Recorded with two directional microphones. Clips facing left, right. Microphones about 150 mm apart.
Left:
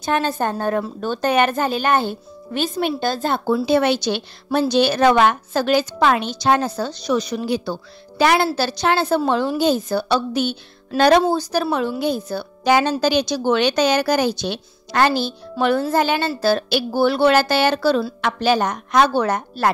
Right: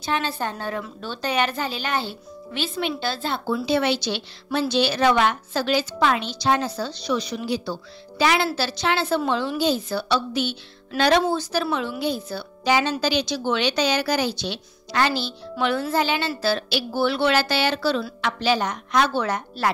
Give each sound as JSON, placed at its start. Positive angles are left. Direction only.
{"t": 0.0, "sound": "a woman's voice", "side_deg": 50}